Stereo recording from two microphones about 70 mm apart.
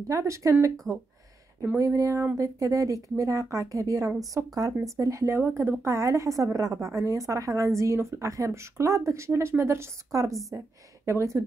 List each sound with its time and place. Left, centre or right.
0.1 s a woman's voice: right